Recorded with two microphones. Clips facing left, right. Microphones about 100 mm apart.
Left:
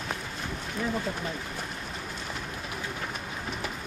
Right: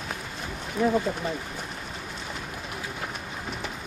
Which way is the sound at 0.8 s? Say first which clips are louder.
Right 8 dB; centre (ahead or behind).